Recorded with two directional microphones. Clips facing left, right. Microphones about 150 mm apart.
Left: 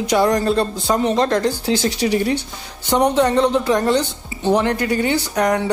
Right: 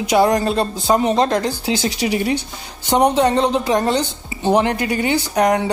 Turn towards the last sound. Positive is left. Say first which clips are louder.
# right 2 dB
turn(degrees=-20)  # may be behind; listen again after turning